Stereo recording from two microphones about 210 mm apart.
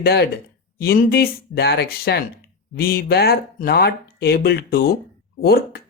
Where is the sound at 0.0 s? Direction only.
50° left (ahead or behind).